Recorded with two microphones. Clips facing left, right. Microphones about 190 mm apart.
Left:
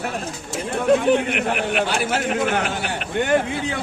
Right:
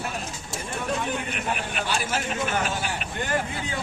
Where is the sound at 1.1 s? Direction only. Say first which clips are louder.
Left 8 dB; 70° left (ahead or behind).